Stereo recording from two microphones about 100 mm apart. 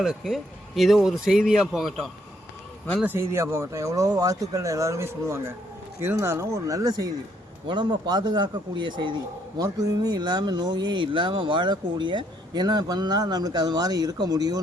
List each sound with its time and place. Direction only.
0.0 s a man's voice: 5° right (ahead or behind)
3.2 s speech: 25° right (ahead or behind); by 9.1 s 55° right (ahead or behind)
9.6 s speech: 40° right (ahead or behind)